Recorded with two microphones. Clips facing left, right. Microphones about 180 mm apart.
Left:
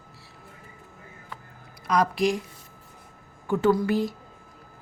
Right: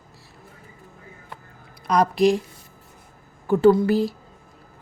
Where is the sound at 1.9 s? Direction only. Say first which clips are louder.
Right 5 dB; 35° right (ahead or behind).